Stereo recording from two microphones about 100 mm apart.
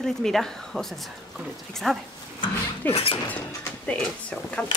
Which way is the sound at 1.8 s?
5° left (ahead or behind).